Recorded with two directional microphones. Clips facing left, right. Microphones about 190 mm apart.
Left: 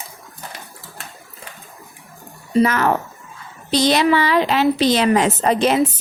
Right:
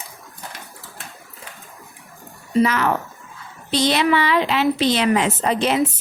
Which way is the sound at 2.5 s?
40° left (ahead or behind).